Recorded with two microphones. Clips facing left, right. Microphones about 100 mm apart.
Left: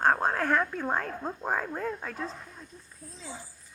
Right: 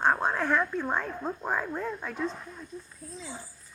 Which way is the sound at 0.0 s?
45° left (ahead or behind).